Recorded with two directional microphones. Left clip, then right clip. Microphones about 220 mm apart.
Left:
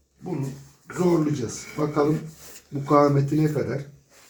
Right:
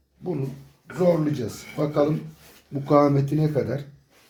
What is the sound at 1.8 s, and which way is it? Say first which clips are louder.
Speech: even; 45° right (ahead or behind).